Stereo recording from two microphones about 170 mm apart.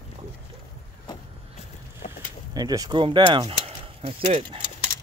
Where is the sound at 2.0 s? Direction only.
45° left (ahead or behind).